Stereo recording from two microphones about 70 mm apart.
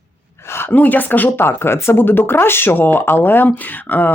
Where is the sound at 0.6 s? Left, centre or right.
Left.